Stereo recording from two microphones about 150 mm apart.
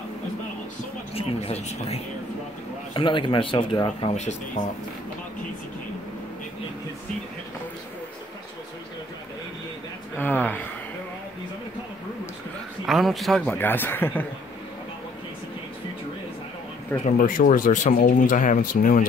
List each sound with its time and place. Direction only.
1.1 s speech: 40° left (ahead or behind)
4.1 s speech: 50° left (ahead or behind)
10.1 s speech: 10° left (ahead or behind)
12.8 s a man's voice: centre (ahead or behind)
13.6 s speech: 15° left (ahead or behind)
17.0 s speech: 65° left (ahead or behind)